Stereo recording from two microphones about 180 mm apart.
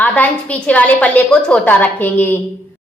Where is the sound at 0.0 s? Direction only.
10° left (ahead or behind).